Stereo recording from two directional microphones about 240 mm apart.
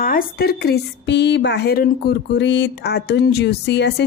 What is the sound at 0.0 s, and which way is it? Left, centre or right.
A woman's voice, left.